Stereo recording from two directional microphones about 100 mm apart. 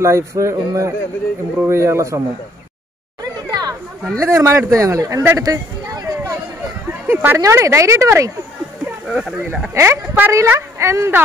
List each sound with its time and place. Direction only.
0.0 s a woman's voice: 30° right (ahead or behind)
3.4 s chatter: 40° right (ahead or behind)
4.2 s speech: 25° right (ahead or behind)
5.4 s a sound: 35° right (ahead or behind)
6.9 s a sound: 20° right (ahead or behind)
7.3 s speech: 30° right (ahead or behind)
9.0 s speech: 5° right (ahead or behind)
9.8 s a woman's voice: 25° right (ahead or behind)